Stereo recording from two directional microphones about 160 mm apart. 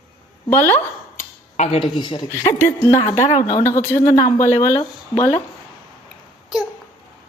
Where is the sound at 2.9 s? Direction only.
45° left (ahead or behind).